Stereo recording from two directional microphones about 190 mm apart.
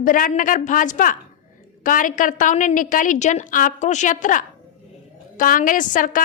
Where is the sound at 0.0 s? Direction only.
45° left (ahead or behind).